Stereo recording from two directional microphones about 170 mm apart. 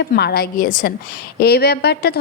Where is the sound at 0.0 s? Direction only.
70° left (ahead or behind); by 0.9 s 55° left (ahead or behind).